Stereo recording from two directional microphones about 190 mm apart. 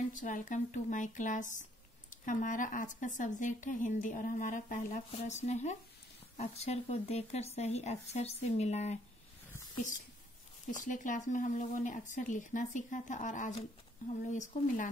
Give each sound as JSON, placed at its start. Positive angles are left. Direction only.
{"t": 0.1, "sound": "speech", "side_deg": 45}
{"t": 10.7, "sound": "speech", "side_deg": 40}